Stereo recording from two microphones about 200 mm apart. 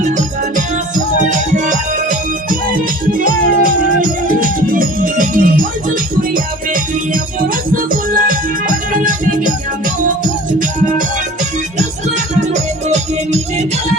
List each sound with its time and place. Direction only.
1.2 s music: 40° right (ahead or behind)
12.9 s music: 35° right (ahead or behind)